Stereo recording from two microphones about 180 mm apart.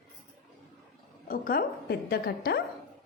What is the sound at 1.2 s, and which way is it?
A woman's voice, 50° left (ahead or behind).